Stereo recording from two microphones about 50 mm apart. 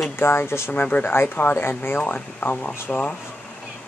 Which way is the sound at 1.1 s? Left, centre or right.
Left.